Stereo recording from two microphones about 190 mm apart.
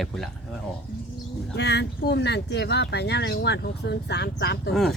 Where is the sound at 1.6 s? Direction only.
60° left (ahead or behind).